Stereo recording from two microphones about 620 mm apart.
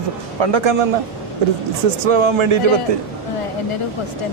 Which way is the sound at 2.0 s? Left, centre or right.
Right.